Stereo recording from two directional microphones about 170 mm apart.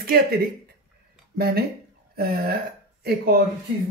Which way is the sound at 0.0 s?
60° right (ahead or behind).